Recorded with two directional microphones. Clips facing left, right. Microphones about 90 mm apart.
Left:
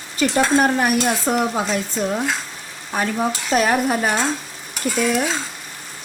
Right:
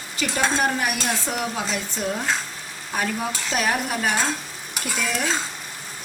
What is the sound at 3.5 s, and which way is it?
Speech, 40° left (ahead or behind).